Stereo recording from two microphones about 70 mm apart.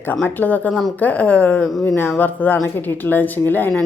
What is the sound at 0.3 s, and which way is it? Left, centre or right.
A woman's voice, left.